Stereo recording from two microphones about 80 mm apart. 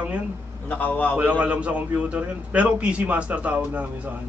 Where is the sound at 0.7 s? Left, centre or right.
Left.